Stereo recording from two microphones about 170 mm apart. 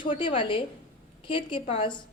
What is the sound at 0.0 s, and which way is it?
A woman's voice, 30° left (ahead or behind).